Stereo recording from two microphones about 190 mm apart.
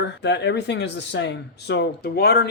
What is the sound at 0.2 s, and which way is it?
Speech, 65° left (ahead or behind).